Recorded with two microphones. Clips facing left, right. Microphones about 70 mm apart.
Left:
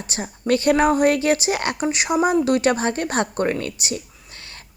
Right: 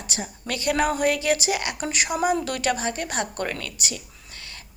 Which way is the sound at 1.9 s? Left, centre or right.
Left.